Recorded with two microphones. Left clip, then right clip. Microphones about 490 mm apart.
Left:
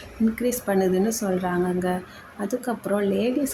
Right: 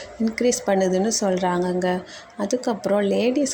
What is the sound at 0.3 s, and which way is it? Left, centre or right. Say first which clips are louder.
Speech: right 5 dB; left.